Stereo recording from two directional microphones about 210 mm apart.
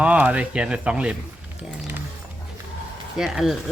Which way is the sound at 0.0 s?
5° right (ahead or behind).